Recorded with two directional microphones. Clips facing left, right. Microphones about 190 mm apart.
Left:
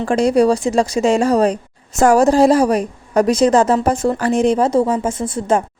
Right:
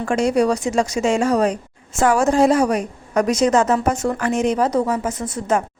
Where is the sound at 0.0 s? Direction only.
35° left (ahead or behind).